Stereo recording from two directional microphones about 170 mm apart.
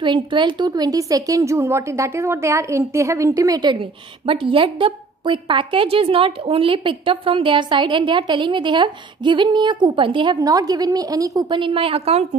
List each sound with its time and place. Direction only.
0.0 s a woman's voice: 30° right (ahead or behind)